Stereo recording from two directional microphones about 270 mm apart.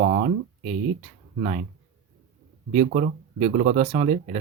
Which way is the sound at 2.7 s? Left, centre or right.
Right.